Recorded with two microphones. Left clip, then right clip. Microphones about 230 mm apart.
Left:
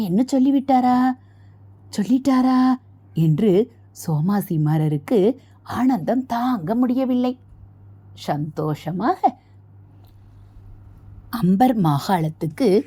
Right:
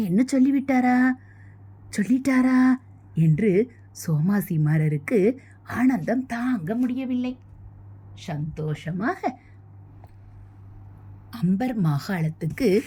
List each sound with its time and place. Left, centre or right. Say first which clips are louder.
0.0 s a woman's voice: left 2 dB; centre
6.8 s speech: left 7 dB; left
8.1 s a woman's voice: left 10 dB; centre
11.3 s a woman's voice: left 10 dB; centre
12.4 s a woman's voice: left 1 dB; centre